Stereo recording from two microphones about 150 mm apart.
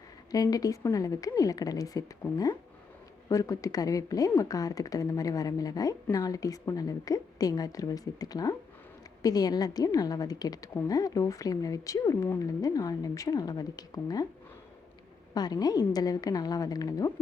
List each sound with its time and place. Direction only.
0.3 s a woman's voice: 25° left (ahead or behind)
15.4 s a woman's voice: 25° left (ahead or behind)